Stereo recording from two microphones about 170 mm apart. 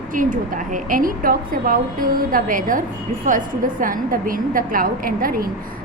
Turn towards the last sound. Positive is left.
turn(degrees=-60)  # may be behind; listen again after turning